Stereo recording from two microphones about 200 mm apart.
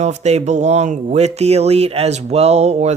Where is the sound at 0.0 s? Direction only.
35° right (ahead or behind).